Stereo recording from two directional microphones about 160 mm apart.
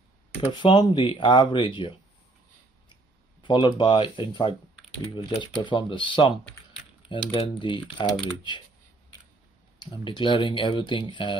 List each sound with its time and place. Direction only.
0.4 s speech: 30° left (ahead or behind)
3.4 s speech: 30° left (ahead or behind)
9.8 s speech: 30° left (ahead or behind)